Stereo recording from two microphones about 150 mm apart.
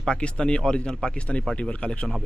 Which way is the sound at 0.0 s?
5° left (ahead or behind).